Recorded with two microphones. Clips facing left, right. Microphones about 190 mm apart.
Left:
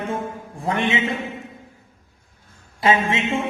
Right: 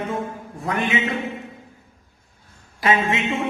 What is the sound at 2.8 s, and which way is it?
Speech, 25° left (ahead or behind).